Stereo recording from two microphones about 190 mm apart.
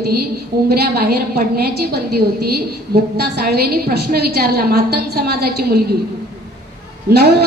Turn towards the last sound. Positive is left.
turn(degrees=-55)  # may be behind; listen again after turning